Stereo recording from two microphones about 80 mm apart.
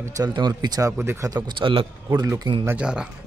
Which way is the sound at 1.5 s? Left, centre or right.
Right.